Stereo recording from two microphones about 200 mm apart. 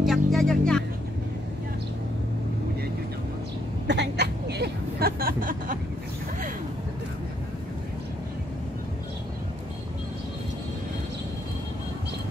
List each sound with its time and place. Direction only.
0.0 s music: centre (ahead or behind)
3.8 s vehicle: 60° right (ahead or behind)